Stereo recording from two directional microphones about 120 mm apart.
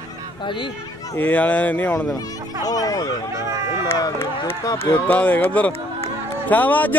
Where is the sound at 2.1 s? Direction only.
30° left (ahead or behind).